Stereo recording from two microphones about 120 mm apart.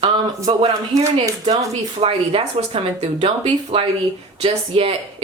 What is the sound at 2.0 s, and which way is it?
Speech, 55° right (ahead or behind).